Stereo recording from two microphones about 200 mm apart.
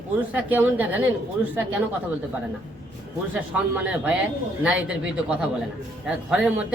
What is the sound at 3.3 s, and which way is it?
A man's voice, 5° right (ahead or behind).